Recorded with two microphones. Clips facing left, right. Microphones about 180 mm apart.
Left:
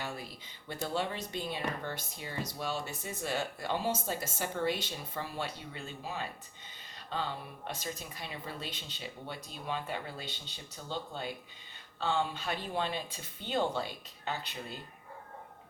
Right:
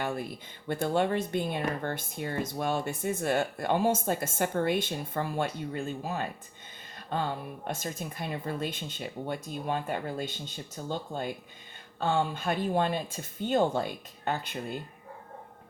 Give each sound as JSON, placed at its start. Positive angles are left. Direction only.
{"t": 0.0, "sound": "speech", "side_deg": -55}